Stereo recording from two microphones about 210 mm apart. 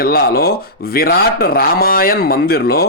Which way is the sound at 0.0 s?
45° left (ahead or behind).